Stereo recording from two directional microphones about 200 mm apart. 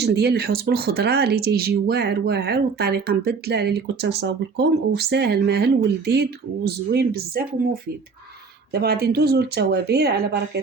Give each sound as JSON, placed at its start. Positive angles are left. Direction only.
{"t": 0.0, "sound": "speech", "side_deg": -55}